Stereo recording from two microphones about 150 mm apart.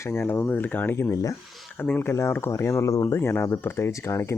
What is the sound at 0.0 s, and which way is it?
Speech, 15° left (ahead or behind).